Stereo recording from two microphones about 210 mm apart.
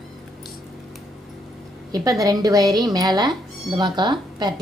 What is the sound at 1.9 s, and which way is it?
Speech, 15° right (ahead or behind).